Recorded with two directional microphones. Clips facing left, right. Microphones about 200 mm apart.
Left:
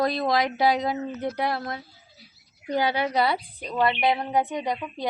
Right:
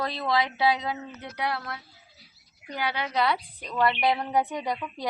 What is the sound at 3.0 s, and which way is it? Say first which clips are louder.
Speech: left 3 dB; 40° left (ahead or behind).